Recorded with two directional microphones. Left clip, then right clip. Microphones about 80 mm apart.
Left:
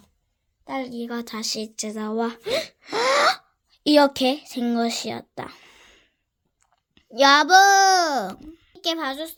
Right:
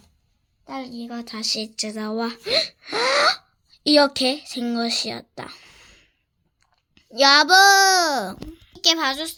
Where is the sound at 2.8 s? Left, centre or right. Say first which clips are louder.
Even; centre.